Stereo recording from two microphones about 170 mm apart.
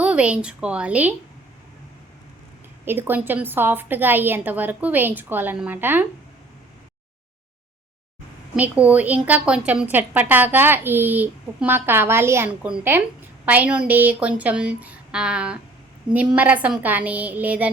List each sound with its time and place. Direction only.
0.0 s a woman's voice: 5° right (ahead or behind)
2.8 s a woman's voice: 10° right (ahead or behind)
8.5 s a woman's voice: 10° right (ahead or behind)